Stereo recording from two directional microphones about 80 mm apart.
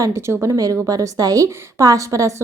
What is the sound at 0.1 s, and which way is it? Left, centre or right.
Speech, right.